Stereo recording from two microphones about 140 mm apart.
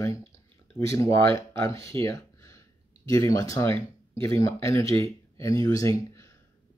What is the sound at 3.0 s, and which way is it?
Speech, 25° left (ahead or behind).